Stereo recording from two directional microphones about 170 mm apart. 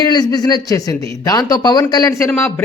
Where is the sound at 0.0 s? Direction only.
25° left (ahead or behind).